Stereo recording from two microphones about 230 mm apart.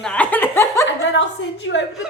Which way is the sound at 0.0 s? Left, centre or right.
Centre.